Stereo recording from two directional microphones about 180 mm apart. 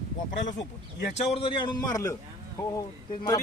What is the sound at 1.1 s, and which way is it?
A man's voice, 35° left (ahead or behind).